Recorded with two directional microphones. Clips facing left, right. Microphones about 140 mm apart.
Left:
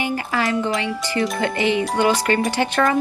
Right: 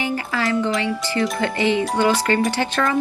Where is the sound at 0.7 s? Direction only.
20° left (ahead or behind).